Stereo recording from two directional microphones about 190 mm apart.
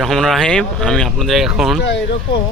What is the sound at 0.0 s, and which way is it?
Speech, centre (ahead or behind).